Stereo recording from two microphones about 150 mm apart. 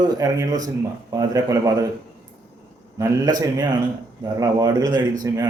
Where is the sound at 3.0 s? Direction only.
25° right (ahead or behind).